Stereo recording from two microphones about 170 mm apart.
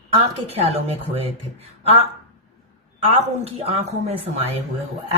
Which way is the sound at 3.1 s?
35° right (ahead or behind).